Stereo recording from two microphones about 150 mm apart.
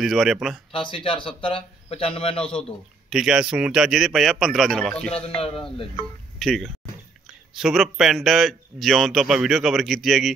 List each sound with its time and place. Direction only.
0.0 s a man's voice: centre (ahead or behind)
0.7 s speech: 35° left (ahead or behind)
3.1 s a man's voice: 5° right (ahead or behind)
5.4 s speech: 40° left (ahead or behind)
5.9 s a man's voice: centre (ahead or behind)